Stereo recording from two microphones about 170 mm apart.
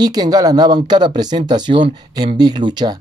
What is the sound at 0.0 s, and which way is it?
Speech, 25° right (ahead or behind).